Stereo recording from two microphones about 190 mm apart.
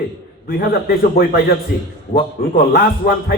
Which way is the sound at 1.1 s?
50° left (ahead or behind).